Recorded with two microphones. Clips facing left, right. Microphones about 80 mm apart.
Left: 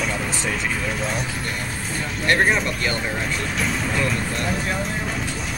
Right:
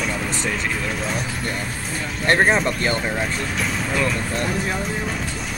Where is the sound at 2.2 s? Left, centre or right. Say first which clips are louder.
Right 2 dB; right.